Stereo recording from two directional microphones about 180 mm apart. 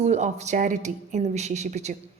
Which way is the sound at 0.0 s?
40° right (ahead or behind).